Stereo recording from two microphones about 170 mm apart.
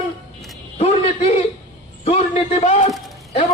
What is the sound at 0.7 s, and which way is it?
A man's voice, 40° left (ahead or behind).